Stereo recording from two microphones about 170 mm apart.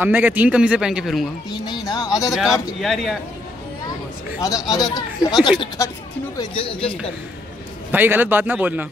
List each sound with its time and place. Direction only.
0.0 s a man's voice: 10° right (ahead or behind)
1.5 s speech: 25° left (ahead or behind)
2.8 s a man's voice: centre (ahead or behind)
4.4 s speech: 20° left (ahead or behind)
7.9 s a man's voice: 10° right (ahead or behind)